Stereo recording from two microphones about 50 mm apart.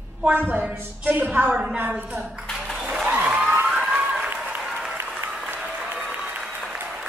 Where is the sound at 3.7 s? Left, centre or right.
Centre.